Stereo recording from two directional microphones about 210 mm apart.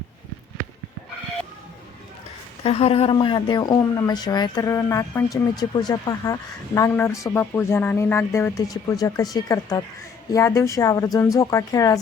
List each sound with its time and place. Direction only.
2.6 s speech: 30° left (ahead or behind)